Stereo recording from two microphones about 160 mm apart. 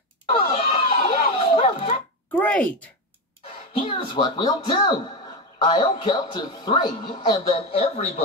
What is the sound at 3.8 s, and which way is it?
Speech, 35° left (ahead or behind).